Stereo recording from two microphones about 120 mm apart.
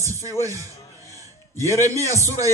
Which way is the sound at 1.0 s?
25° right (ahead or behind).